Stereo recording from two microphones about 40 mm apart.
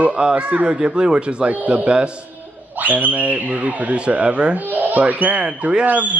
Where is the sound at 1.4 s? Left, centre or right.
Right.